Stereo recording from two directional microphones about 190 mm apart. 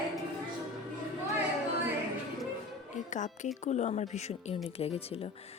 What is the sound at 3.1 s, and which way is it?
Speech, 40° left (ahead or behind).